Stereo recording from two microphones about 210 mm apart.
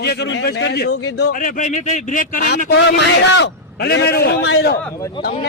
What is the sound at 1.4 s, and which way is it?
A man's voice, 35° left (ahead or behind).